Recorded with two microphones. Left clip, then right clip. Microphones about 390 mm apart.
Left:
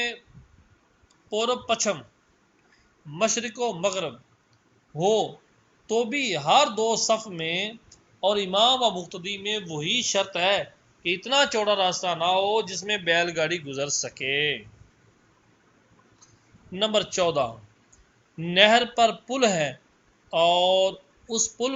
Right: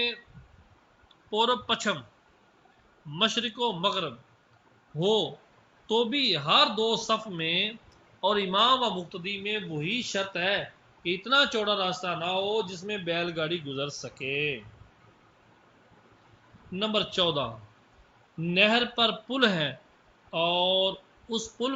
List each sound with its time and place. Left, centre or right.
1.3 s a man's voice: centre
3.2 s a man's voice: centre
12.3 s speech: left
12.8 s a man's voice: left
16.7 s a man's voice: centre